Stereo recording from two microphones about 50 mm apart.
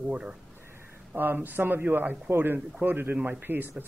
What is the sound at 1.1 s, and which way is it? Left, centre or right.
A man's voice, right.